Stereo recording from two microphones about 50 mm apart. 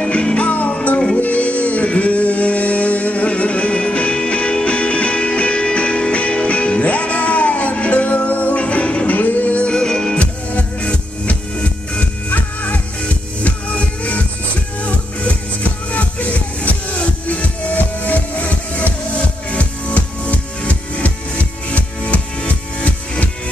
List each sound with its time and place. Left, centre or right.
0.0 s music: centre
9.7 s music: centre